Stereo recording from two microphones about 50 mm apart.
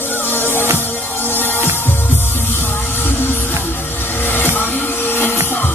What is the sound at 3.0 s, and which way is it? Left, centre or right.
Music, left.